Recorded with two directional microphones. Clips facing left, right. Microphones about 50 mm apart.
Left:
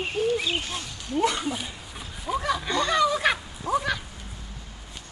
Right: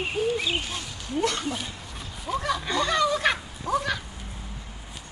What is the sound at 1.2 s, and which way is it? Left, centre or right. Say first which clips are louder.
Speech: left 2 dB; centre.